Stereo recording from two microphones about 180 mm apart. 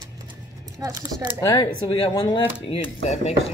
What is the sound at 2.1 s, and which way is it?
Speech, 25° left (ahead or behind).